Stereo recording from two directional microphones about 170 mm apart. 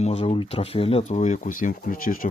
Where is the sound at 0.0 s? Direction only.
35° left (ahead or behind).